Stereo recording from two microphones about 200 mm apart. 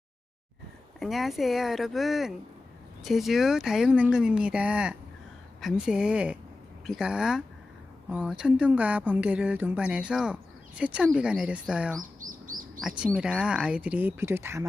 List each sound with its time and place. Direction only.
0.9 s speech: centre (ahead or behind)
12.2 s bird: 45° right (ahead or behind)
12.8 s speech: 5° right (ahead or behind)